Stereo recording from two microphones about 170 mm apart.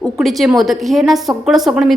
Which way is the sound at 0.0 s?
Centre (ahead or behind).